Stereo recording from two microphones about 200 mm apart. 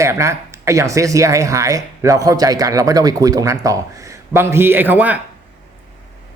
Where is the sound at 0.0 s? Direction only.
15° right (ahead or behind).